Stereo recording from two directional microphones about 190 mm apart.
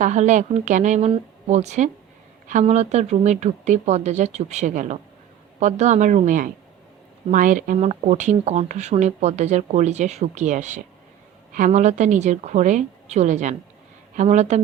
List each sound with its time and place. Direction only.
0.0 s speech: 40° right (ahead or behind)